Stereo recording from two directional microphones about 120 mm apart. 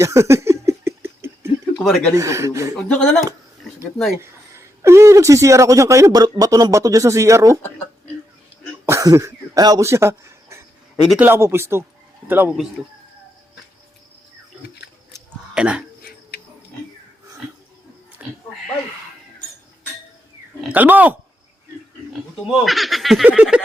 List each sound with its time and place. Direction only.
0.0 s a sound: 25° right (ahead or behind)
1.8 s speech: 5° left (ahead or behind)
2.1 s a man's voice: 25° right (ahead or behind)
2.9 s speech: 10° left (ahead or behind)
4.2 s a man's voice: 25° right (ahead or behind)
8.9 s a man's voice: 25° right (ahead or behind)
15.5 s speech: 10° right (ahead or behind)
18.2 s a sound: 5° right (ahead or behind)
20.7 s speech: 15° right (ahead or behind)
22.4 s speech: centre (ahead or behind)